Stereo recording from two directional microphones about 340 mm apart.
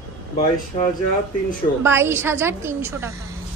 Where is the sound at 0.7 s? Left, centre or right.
Centre.